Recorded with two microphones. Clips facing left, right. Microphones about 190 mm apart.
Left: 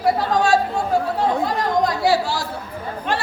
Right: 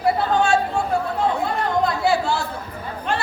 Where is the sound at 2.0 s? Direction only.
35° left (ahead or behind).